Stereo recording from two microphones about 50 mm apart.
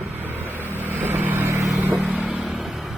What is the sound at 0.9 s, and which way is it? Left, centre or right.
Vehicle, right.